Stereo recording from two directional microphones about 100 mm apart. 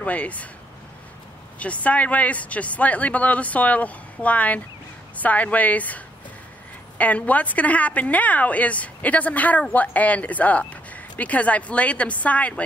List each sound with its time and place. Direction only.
0.0 s a woman's voice: 15° left (ahead or behind)
1.6 s a woman's voice: 15° left (ahead or behind)